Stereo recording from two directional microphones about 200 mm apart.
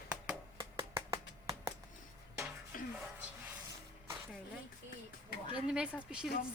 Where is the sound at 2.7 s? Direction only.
45° left (ahead or behind).